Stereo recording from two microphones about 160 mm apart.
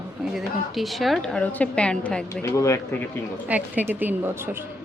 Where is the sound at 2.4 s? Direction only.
15° left (ahead or behind).